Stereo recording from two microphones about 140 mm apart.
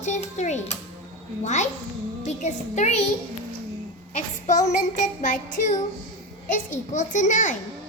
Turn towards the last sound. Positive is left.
turn(degrees=65)  # may be behind; listen again after turning